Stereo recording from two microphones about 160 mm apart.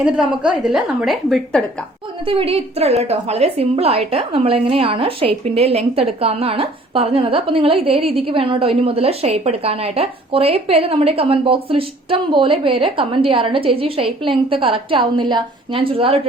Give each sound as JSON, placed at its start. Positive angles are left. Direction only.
{"t": 0.0, "sound": "a woman's voice", "side_deg": -5}
{"t": 2.2, "sound": "a woman's voice", "side_deg": -35}